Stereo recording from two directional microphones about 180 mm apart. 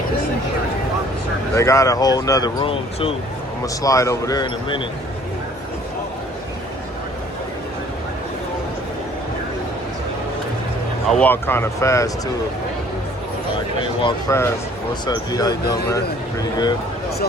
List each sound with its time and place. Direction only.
1.5 s speech: 15° left (ahead or behind)
3.8 s speech: 15° left (ahead or behind)
11.0 s speech: 5° left (ahead or behind)
13.7 s speech: 25° left (ahead or behind)
14.3 s speech: 15° left (ahead or behind)